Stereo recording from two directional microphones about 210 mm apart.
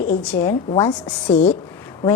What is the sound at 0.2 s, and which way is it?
A woman's voice, 5° left (ahead or behind).